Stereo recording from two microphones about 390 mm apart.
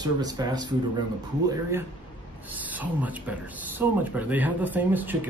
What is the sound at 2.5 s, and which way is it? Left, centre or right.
Speech, centre.